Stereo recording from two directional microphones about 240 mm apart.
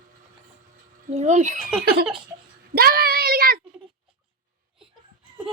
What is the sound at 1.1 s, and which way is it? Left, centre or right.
Speech, right.